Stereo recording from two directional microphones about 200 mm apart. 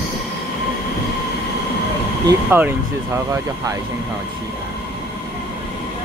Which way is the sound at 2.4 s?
10° right (ahead or behind).